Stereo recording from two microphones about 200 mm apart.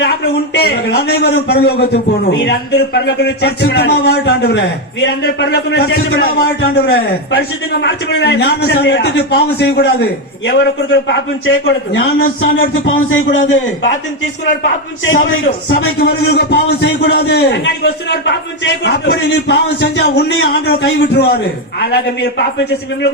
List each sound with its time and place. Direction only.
0.0 s a man's voice: 55° left (ahead or behind)
12.4 s speech: 50° left (ahead or behind)
12.8 s a man's voice: 75° left (ahead or behind)
16.0 s a man's voice: 55° left (ahead or behind)